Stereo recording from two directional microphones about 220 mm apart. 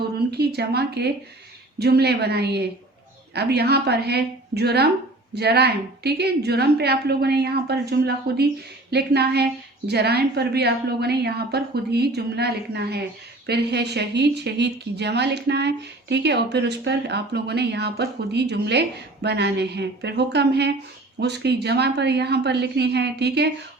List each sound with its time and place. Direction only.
0.3 s a woman's voice: 50° right (ahead or behind)